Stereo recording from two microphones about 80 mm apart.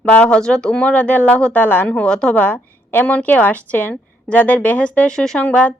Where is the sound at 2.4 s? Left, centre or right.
Left.